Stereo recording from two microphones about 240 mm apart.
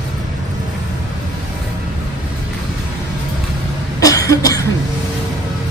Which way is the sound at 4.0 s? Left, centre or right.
Centre.